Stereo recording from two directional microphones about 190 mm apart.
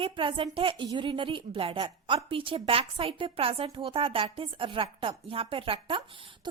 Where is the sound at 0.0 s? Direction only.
25° right (ahead or behind).